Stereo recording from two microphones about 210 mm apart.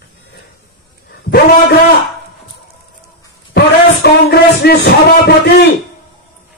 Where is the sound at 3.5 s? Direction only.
50° left (ahead or behind).